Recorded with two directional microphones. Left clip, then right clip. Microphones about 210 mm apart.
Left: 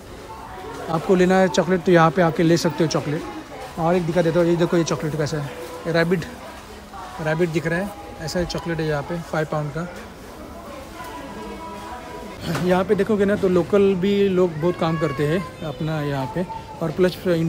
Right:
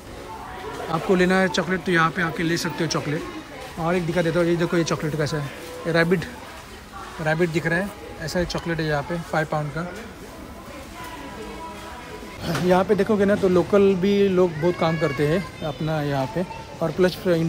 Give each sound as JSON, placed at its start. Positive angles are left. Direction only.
{"t": 1.1, "sound": "speech", "side_deg": 15}
{"t": 7.2, "sound": "speech", "side_deg": 10}
{"t": 12.4, "sound": "speech", "side_deg": 5}